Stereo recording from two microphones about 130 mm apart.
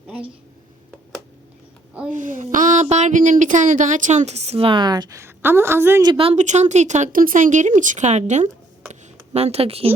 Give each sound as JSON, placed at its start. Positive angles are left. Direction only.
{"t": 2.0, "sound": "speech", "side_deg": -85}
{"t": 2.8, "sound": "a woman's voice", "side_deg": -60}
{"t": 6.3, "sound": "a woman's voice", "side_deg": -65}